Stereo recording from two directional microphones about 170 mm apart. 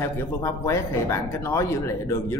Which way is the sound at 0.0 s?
15° left (ahead or behind).